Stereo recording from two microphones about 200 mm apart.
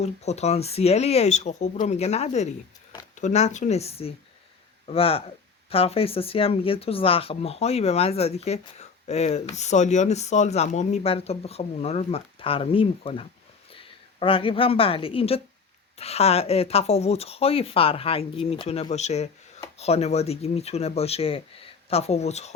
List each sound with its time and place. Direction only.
0.0 s speech: 35° left (ahead or behind)